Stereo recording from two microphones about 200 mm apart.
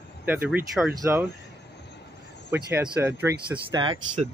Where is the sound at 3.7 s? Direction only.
20° right (ahead or behind).